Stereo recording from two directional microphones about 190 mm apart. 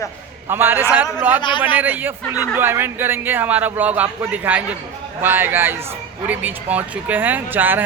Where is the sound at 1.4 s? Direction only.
25° left (ahead or behind).